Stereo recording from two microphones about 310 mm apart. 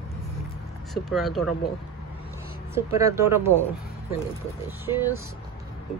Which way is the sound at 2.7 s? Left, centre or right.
Centre.